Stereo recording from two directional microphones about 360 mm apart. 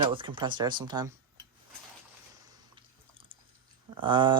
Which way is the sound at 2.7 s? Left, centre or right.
Centre.